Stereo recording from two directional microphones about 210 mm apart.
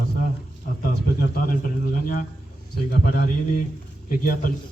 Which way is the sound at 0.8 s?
45° left (ahead or behind).